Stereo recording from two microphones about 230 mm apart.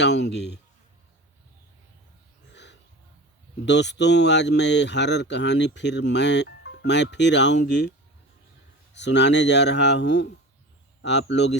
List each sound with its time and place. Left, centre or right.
0.0 s speech: left
2.5 s a sound: left
3.7 s speech: left
9.0 s speech: left